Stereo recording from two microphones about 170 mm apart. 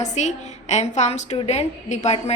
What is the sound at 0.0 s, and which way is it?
A woman's voice, 40° left (ahead or behind).